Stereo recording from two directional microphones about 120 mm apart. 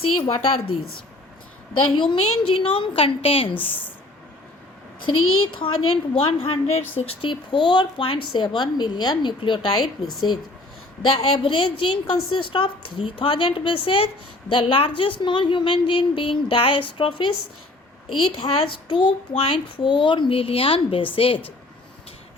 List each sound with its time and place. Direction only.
0.3 s a woman's voice: 55° left (ahead or behind)
1.7 s a woman's voice: 45° left (ahead or behind)
5.5 s a woman's voice: 50° left (ahead or behind)
10.0 s a woman's voice: centre (ahead or behind)
11.0 s a woman's voice: 45° left (ahead or behind)